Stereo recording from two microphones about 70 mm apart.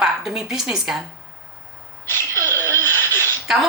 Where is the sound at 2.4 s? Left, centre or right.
Left.